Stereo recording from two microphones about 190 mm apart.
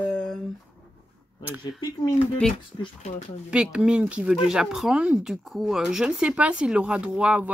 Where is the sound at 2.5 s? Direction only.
30° left (ahead or behind).